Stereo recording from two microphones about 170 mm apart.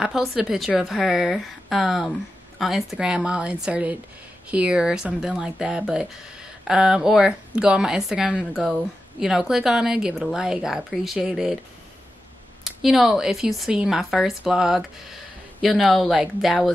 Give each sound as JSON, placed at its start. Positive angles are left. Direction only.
{"t": 0.0, "sound": "a woman's voice", "side_deg": 0}
{"t": 12.6, "sound": "a woman's voice", "side_deg": 0}